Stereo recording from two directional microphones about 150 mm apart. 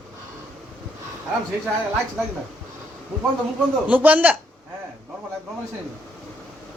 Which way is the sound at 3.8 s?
10° right (ahead or behind).